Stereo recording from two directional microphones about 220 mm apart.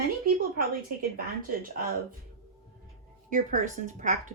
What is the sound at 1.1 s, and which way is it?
A woman's voice, 40° right (ahead or behind).